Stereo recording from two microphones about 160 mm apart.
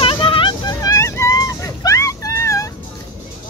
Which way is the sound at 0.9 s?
20° left (ahead or behind).